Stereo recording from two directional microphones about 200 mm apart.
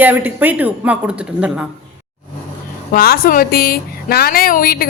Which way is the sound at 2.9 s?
50° left (ahead or behind).